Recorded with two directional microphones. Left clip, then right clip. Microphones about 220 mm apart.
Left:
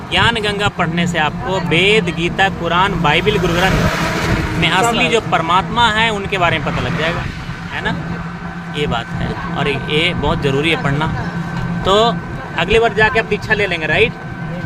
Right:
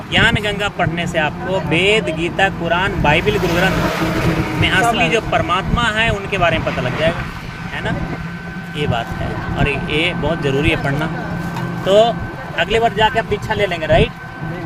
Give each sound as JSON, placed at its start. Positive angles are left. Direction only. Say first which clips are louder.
{"t": 0.1, "sound": "speech", "louder": "even", "side_deg": 15}
{"t": 8.8, "sound": "speech", "louder": "left 1 dB", "side_deg": 20}